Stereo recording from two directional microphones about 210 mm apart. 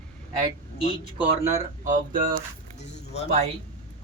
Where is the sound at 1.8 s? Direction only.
40° right (ahead or behind).